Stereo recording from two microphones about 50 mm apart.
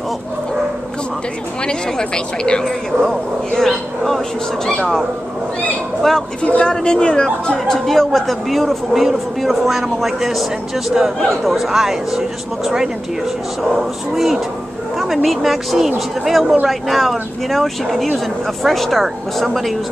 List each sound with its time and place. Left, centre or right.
1.7 s a woman's voice: centre
3.5 s speech: centre
6.0 s a woman's voice: centre
6.4 s a woman's voice: left; by 10.4 s centre
11.4 s speech: centre